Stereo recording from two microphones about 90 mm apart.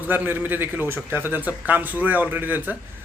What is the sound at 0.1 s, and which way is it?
A man's voice, 20° right (ahead or behind).